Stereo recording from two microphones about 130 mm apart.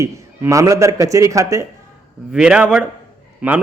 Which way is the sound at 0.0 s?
25° right (ahead or behind).